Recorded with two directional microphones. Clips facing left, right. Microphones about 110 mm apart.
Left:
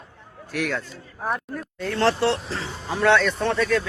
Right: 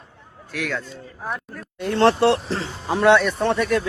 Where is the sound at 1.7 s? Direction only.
20° right (ahead or behind).